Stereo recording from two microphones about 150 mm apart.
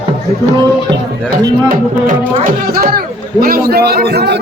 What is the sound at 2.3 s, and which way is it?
Speech, 70° right (ahead or behind).